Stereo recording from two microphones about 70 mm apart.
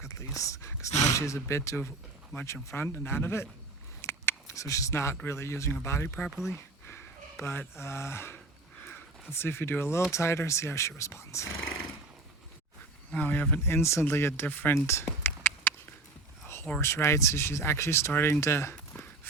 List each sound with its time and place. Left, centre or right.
0.0 s whispering: left
0.4 s speech: left
4.0 s a sound: left
4.5 s speech: left
7.4 s speech: left
13.1 s speech: left
13.7 s speech: left
14.4 s speech: left
14.8 s speech: left
16.8 s speech: left
18.3 s speech: left